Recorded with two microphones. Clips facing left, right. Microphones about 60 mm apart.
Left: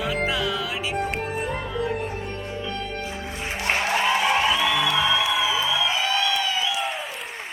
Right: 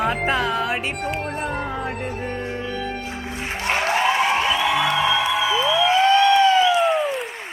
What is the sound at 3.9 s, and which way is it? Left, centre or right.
Music, right.